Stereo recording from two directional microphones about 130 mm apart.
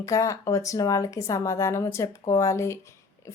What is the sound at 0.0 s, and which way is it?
A woman's voice, 25° left (ahead or behind).